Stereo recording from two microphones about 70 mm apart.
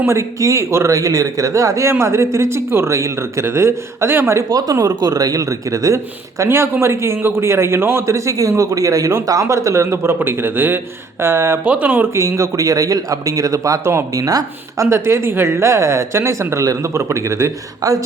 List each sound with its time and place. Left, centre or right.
0.0 s speech: right
4.4 s a man's voice: right
6.4 s a man's voice: right
11.6 s speech: right
12.1 s speech: right
14.8 s a man's voice: right